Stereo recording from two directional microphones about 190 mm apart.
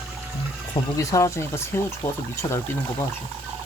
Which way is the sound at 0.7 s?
15° left (ahead or behind).